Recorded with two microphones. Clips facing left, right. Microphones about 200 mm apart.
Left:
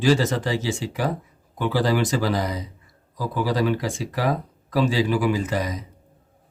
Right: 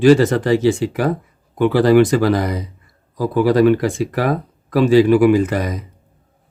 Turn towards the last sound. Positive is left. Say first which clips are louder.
# right 8 dB
turn(degrees=-60)  # may be behind; listen again after turning